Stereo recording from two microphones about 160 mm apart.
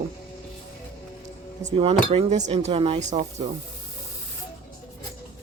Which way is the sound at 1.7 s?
35° right (ahead or behind).